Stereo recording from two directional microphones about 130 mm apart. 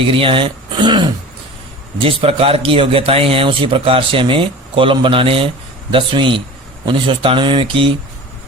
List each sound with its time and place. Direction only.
0.0 s speech: 45° right (ahead or behind)